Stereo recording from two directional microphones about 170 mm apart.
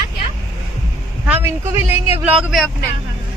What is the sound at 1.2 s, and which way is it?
A woman's voice, 10° right (ahead or behind).